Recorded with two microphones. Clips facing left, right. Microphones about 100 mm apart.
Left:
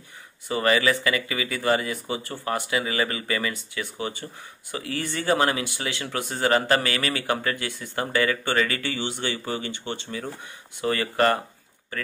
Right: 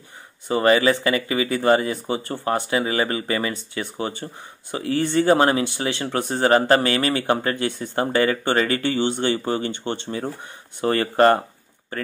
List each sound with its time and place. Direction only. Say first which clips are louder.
0.5 s speech: right 5 dB; 30° right (ahead or behind)